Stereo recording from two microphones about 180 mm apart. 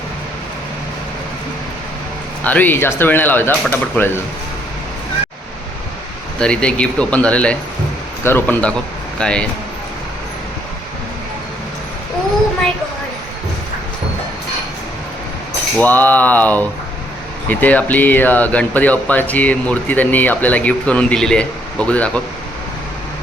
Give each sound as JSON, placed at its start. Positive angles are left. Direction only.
{"t": 2.4, "sound": "speech", "side_deg": 10}
{"t": 6.4, "sound": "speech", "side_deg": 5}
{"t": 15.8, "sound": "speech", "side_deg": 10}